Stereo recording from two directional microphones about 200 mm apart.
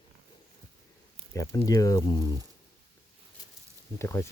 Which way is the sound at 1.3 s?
15° left (ahead or behind).